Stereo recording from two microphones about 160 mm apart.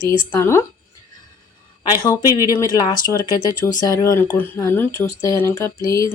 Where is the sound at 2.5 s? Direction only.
20° left (ahead or behind).